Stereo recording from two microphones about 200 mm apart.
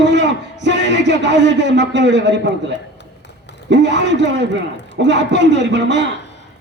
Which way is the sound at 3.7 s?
60° right (ahead or behind).